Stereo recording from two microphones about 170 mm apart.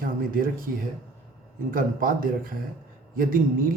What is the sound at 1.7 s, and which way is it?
Speech, 55° right (ahead or behind).